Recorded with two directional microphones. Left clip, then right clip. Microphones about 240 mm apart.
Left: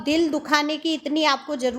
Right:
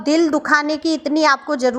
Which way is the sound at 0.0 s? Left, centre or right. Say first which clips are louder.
Right 6 dB; centre.